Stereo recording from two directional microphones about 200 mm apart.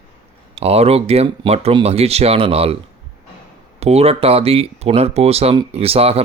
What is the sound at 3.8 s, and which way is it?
Speech, 30° right (ahead or behind).